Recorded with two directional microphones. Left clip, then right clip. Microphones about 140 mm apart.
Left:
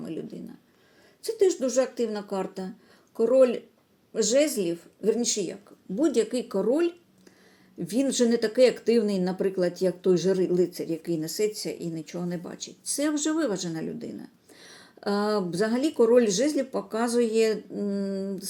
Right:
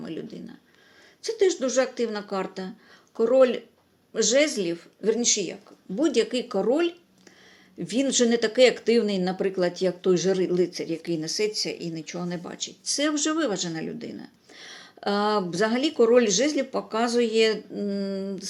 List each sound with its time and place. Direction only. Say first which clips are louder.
0.2 s speech: even; 25° left (ahead or behind)